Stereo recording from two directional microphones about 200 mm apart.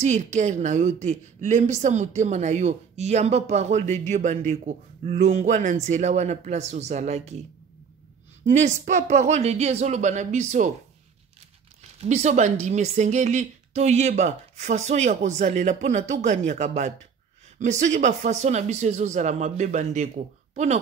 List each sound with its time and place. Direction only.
0.0 s a woman's voice: 35° right (ahead or behind)
8.5 s a woman's voice: 35° right (ahead or behind)
12.0 s a woman's voice: 35° right (ahead or behind)